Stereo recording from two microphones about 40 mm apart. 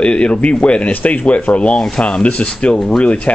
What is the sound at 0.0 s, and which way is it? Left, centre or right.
Speech, left.